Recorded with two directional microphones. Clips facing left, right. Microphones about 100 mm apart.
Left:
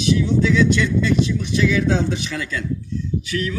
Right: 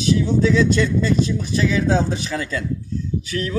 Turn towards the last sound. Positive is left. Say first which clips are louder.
# left 1 dB
turn(degrees=-35)  # may be behind; listen again after turning